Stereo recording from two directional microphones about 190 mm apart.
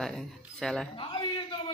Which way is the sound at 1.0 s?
25° left (ahead or behind).